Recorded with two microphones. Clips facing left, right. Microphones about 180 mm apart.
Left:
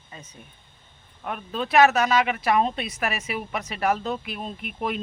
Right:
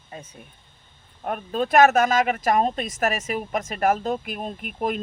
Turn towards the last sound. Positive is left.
turn(degrees=-45)  # may be behind; listen again after turning